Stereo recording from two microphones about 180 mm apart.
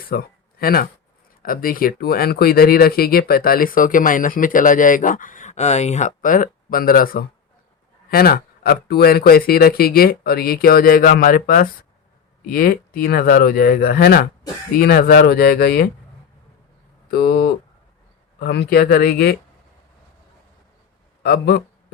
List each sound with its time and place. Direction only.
0.1 s speech: 55° left (ahead or behind)
17.1 s speech: 60° left (ahead or behind)
21.2 s speech: 60° left (ahead or behind)